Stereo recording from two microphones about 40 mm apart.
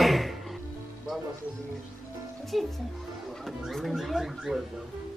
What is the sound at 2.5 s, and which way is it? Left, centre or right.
Speech, centre.